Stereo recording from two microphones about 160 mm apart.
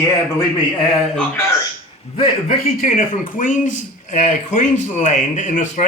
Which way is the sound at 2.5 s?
55° left (ahead or behind).